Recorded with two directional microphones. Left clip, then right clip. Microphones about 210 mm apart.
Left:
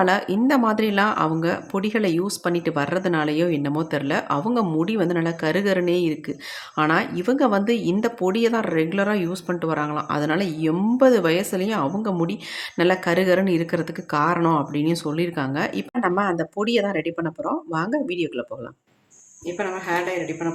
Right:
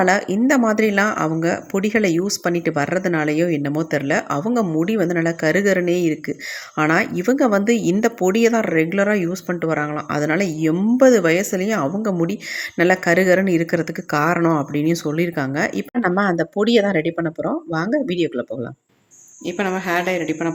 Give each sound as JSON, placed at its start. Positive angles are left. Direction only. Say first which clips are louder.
{"t": 0.4, "sound": "speech", "louder": "right 4 dB", "side_deg": -10}
{"t": 19.5, "sound": "speech", "louder": "right 4 dB", "side_deg": -45}